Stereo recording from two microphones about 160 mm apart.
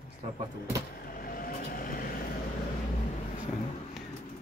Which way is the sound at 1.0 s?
60° left (ahead or behind).